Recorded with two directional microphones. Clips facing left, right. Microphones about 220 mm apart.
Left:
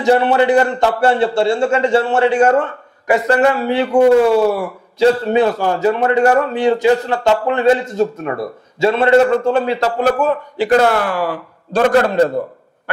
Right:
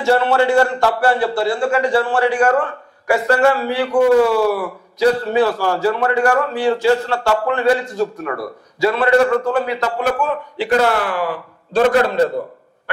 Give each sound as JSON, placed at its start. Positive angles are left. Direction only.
{"t": 0.0, "sound": "a man's voice", "side_deg": 15}